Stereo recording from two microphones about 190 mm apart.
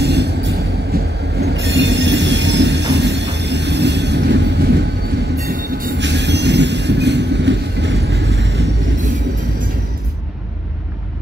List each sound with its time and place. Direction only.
0.0 s train: 60° right (ahead or behind)
5.5 s train: 50° right (ahead or behind)